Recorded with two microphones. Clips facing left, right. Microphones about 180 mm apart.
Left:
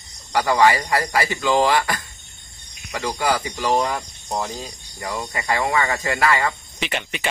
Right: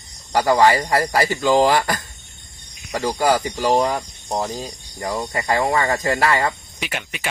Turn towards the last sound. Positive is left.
turn(degrees=-5)  # may be behind; listen again after turning